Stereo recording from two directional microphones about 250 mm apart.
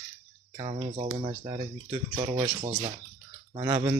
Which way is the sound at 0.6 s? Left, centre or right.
Right.